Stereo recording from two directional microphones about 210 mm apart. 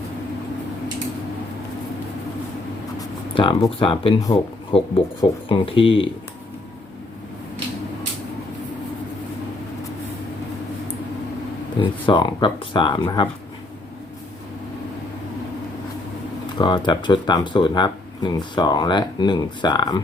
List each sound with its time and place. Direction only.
3.3 s speech: 25° left (ahead or behind)
11.8 s speech: 20° left (ahead or behind)
16.6 s speech: 20° left (ahead or behind)